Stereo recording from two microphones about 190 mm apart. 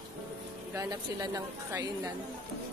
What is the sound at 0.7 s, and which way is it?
A woman's voice, 20° right (ahead or behind).